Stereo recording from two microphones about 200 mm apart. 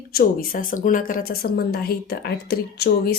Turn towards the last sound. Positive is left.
turn(degrees=50)  # may be behind; listen again after turning